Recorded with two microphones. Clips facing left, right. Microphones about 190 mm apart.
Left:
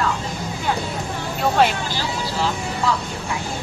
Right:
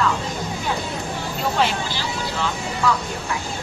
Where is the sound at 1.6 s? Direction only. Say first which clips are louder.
Left 4 dB; 50° left (ahead or behind).